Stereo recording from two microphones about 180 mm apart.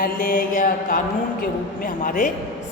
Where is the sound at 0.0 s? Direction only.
55° left (ahead or behind).